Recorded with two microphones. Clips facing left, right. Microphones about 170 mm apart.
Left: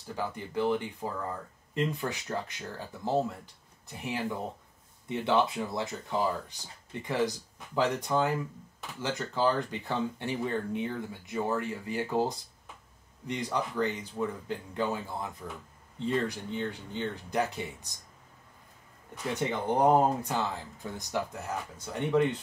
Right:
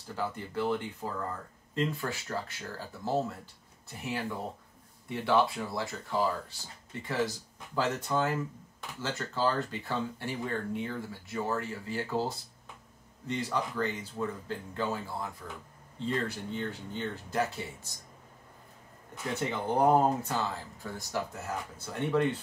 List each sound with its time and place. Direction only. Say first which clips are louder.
0.1 s speech: left 1 dB; 15° left (ahead or behind)
19.5 s speech: left 1 dB; 20° left (ahead or behind)